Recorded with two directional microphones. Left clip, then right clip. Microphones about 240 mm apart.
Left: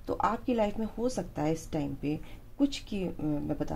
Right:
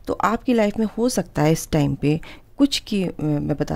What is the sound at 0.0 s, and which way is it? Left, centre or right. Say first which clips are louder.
Speech: right 8 dB; right.